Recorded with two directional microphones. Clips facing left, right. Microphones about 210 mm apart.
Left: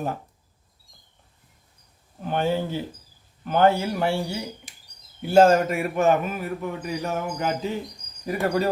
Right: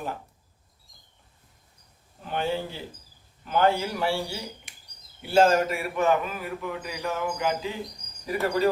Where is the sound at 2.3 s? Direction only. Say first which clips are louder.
Left 4 dB; 45° left (ahead or behind).